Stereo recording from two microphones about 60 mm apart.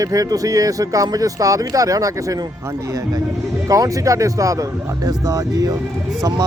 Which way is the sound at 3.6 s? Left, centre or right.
Right.